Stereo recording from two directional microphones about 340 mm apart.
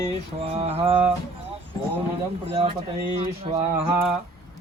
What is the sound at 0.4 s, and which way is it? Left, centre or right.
Speech, centre.